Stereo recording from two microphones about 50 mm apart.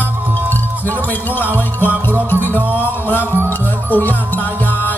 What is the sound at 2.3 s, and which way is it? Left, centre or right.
Music, left.